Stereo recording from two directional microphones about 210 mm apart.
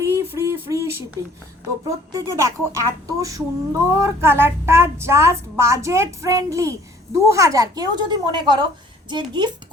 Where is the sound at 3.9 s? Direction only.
10° right (ahead or behind).